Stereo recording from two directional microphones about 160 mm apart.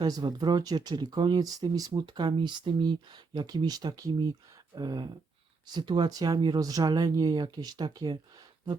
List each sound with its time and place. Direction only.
0.0 s speech: 25° right (ahead or behind)